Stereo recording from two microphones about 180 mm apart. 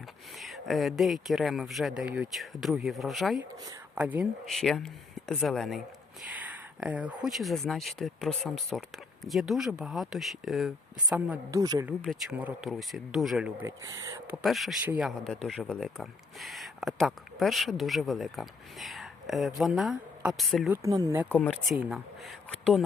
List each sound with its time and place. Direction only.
0.3 s speech: centre (ahead or behind)
11.5 s speech: 20° right (ahead or behind)
12.0 s speech: 5° right (ahead or behind)
14.4 s speech: centre (ahead or behind)
20.8 s speech: 15° right (ahead or behind)
21.3 s speech: 10° left (ahead or behind)
21.8 s speech: centre (ahead or behind)